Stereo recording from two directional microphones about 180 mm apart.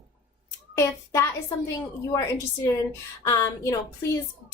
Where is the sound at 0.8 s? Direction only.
15° left (ahead or behind).